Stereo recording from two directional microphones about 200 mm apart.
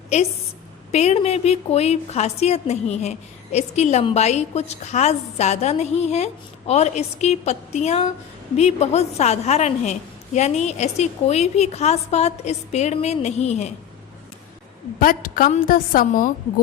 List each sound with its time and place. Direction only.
0.1 s a woman's voice: 35° left (ahead or behind)
14.9 s a woman's voice: 45° left (ahead or behind)